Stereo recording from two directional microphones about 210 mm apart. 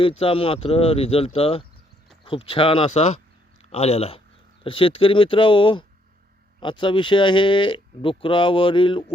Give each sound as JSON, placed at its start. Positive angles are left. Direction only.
{"t": 0.2, "sound": "speech", "side_deg": 25}